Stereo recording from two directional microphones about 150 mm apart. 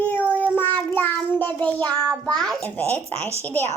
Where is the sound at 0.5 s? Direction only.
15° left (ahead or behind).